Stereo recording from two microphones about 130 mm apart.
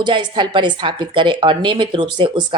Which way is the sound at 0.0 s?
35° right (ahead or behind).